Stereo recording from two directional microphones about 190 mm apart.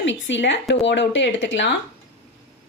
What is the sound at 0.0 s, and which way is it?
A woman's voice, 75° left (ahead or behind).